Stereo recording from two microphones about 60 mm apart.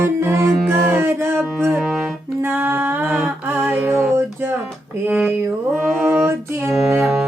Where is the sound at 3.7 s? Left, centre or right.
Right.